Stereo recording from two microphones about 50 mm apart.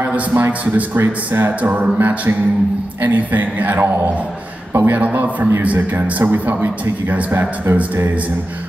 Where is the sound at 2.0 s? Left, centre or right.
Right.